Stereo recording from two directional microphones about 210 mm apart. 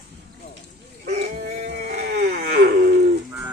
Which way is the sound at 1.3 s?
45° right (ahead or behind).